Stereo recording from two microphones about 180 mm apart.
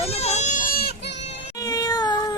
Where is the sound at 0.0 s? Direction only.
35° left (ahead or behind); by 1.2 s 65° left (ahead or behind).